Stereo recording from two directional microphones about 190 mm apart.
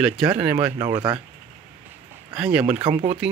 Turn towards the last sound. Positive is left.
turn(degrees=-20)  # may be behind; listen again after turning